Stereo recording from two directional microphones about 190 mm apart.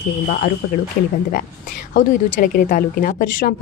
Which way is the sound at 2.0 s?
45° left (ahead or behind).